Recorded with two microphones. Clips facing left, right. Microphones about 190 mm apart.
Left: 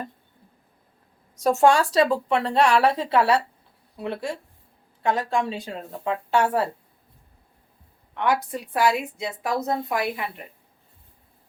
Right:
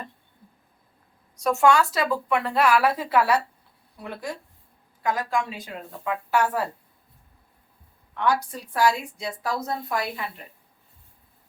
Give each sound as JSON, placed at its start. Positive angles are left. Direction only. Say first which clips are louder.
{"t": 1.5, "sound": "a woman's voice", "louder": "left 2 dB", "side_deg": 30}
{"t": 8.1, "sound": "a woman's voice", "louder": "left 1 dB", "side_deg": 20}